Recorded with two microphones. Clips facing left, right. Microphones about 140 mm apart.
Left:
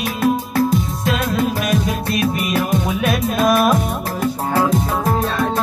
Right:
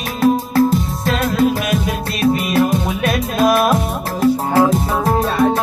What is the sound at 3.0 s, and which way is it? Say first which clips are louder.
Music: right 2 dB; centre (ahead or behind).